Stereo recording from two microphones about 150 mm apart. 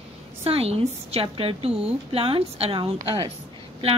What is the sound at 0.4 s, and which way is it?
A woman's voice, 40° right (ahead or behind).